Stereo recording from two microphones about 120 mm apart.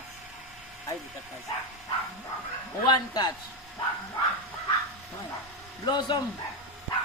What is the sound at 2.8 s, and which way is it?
Speech, 35° left (ahead or behind).